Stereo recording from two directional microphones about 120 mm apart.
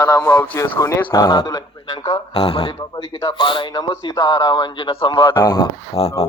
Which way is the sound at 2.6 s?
35° left (ahead or behind).